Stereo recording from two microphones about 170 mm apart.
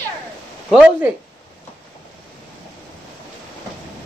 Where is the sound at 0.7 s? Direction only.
10° right (ahead or behind).